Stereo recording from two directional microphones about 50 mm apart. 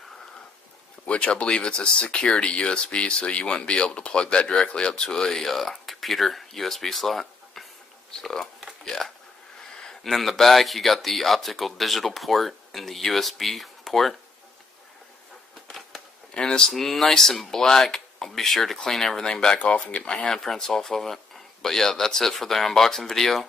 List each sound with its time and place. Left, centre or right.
1.0 s speech: left; by 14.1 s centre
16.3 s speech: centre
16.7 s speech: centre